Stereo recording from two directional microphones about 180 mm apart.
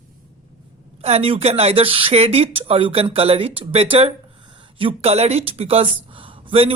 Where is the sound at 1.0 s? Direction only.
35° right (ahead or behind).